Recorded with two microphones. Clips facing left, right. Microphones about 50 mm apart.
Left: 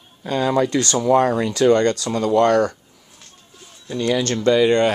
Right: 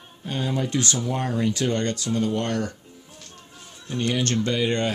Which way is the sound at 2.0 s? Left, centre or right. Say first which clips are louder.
Left 8 dB; left.